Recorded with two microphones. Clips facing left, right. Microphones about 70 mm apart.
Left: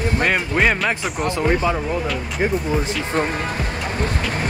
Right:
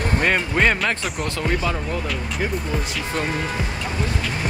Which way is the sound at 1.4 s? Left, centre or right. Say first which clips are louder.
Left 5 dB; left.